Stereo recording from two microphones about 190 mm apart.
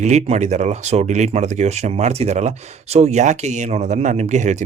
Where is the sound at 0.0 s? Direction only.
35° right (ahead or behind).